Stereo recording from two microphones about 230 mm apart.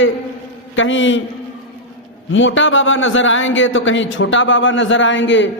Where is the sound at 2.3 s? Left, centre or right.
Left.